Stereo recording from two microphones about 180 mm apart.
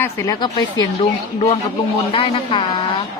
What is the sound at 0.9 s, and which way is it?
Speech, 35° left (ahead or behind).